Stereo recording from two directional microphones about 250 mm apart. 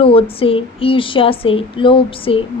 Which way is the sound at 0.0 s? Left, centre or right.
Left.